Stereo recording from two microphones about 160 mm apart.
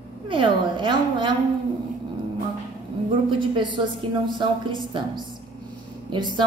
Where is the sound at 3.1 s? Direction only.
30° right (ahead or behind).